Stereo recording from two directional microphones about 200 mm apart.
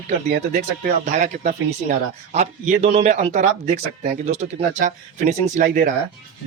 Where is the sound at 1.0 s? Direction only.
35° right (ahead or behind).